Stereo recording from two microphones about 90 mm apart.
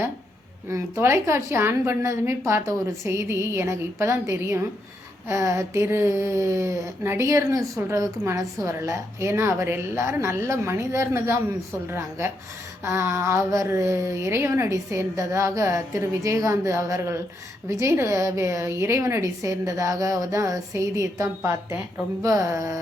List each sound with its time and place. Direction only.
0.7 s a woman's voice: 30° right (ahead or behind)